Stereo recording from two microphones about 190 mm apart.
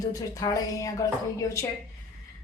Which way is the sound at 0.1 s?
20° left (ahead or behind).